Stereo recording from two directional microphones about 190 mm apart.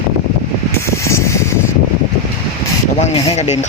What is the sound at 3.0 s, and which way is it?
Speech, 35° left (ahead or behind).